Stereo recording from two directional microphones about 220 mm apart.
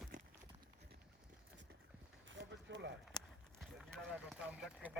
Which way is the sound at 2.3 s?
50° right (ahead or behind).